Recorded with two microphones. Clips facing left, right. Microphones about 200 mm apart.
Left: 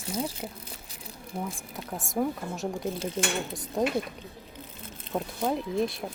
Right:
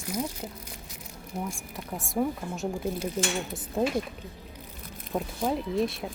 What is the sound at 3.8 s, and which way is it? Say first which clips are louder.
Speech: even; 5° right (ahead or behind).